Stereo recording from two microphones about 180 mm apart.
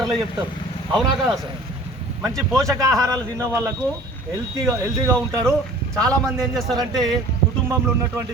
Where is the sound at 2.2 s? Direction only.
20° right (ahead or behind).